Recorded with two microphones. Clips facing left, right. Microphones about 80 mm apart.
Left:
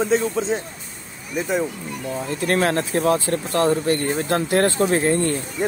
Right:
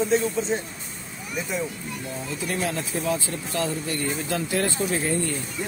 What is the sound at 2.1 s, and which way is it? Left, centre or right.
Speech, left.